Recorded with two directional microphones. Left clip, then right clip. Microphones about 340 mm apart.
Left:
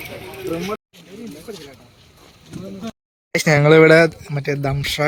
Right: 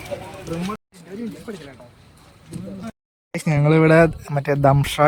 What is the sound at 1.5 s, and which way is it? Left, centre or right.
Speech, centre.